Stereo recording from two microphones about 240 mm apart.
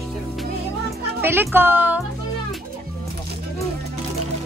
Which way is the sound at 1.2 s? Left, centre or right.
Centre.